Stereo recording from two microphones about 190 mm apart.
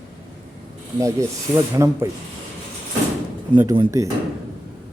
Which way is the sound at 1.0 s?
15° right (ahead or behind).